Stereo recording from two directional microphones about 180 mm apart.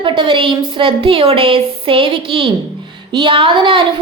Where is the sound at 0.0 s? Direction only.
25° right (ahead or behind).